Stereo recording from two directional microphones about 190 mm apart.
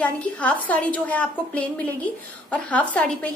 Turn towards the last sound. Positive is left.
turn(degrees=5)  # may be behind; listen again after turning